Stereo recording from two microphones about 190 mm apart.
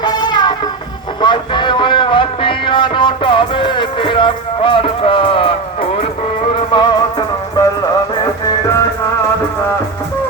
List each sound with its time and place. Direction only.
0.0 s music: 25° left (ahead or behind)
1.2 s speech: 25° left (ahead or behind)
6.5 s music: 25° left (ahead or behind)